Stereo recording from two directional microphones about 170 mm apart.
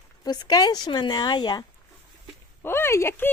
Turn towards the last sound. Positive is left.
turn(degrees=15)  # may be behind; listen again after turning